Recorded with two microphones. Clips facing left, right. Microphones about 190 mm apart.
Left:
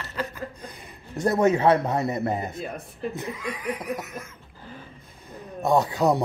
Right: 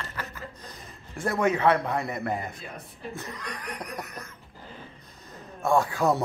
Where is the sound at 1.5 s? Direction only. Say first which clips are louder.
Left 3 dB; 25° left (ahead or behind).